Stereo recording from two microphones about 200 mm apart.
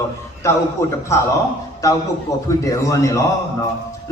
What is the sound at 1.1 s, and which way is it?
Speech, 15° left (ahead or behind).